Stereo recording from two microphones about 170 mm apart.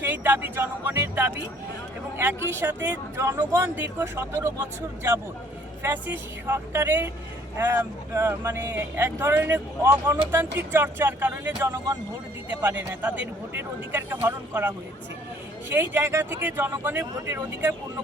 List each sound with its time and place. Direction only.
0.0 s speech: 10° right (ahead or behind)
5.8 s speech: 10° right (ahead or behind)